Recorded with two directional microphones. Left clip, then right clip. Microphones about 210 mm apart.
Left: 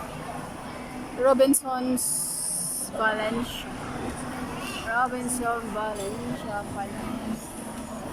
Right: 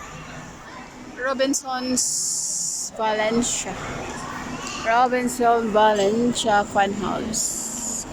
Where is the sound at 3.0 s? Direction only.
15° right (ahead or behind).